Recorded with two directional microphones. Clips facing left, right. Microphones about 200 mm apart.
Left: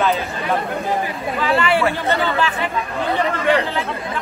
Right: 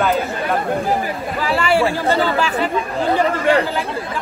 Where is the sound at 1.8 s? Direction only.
30° right (ahead or behind).